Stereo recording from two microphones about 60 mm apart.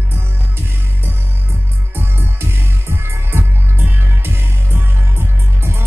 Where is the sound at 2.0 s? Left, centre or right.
Right.